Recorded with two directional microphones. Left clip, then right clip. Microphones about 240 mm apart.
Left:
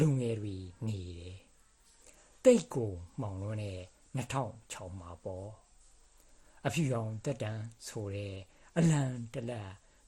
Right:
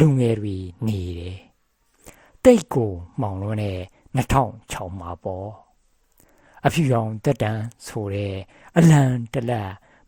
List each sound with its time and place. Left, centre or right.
0.0 s speech: right